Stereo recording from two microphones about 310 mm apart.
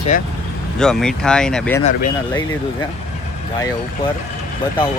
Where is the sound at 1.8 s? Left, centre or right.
Left.